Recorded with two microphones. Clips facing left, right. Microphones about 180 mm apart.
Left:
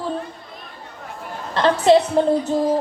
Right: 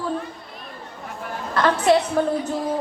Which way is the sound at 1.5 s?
25° left (ahead or behind).